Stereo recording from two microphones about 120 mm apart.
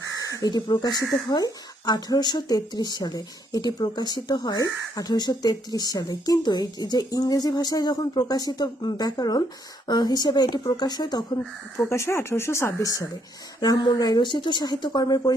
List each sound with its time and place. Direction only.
0.2 s speech: 30° left (ahead or behind)
11.3 s speech: 20° left (ahead or behind)